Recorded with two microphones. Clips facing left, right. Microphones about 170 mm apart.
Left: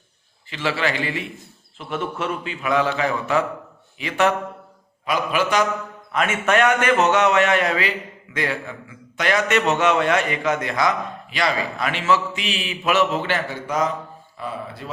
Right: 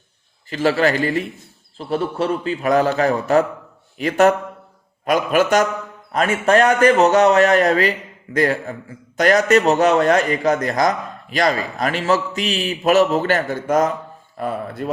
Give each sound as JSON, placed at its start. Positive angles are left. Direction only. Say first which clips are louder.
{"t": 0.5, "sound": "a man's voice", "louder": "right 7 dB", "side_deg": -40}
{"t": 6.1, "sound": "a man's voice", "louder": "right 4 dB", "side_deg": -35}